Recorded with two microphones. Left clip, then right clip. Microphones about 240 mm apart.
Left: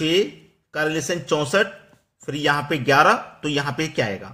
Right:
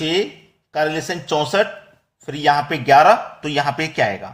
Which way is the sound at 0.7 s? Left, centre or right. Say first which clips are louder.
Right 3 dB; centre.